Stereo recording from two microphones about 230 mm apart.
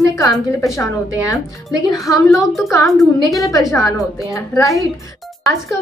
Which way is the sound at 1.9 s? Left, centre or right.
Centre.